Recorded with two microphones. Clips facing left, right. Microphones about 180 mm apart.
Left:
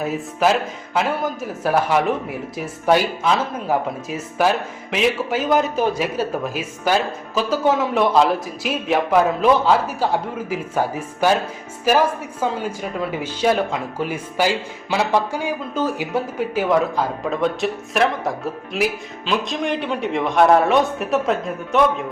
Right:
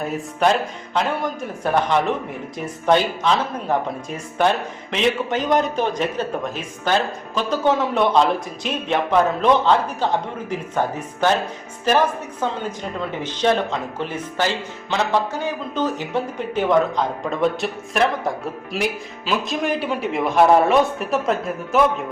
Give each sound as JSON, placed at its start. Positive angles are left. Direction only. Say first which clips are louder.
{"t": 0.0, "sound": "speech", "louder": "left 1 dB", "side_deg": 0}